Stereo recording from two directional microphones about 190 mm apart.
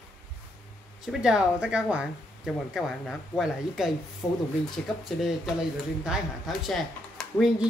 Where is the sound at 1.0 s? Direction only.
5° right (ahead or behind).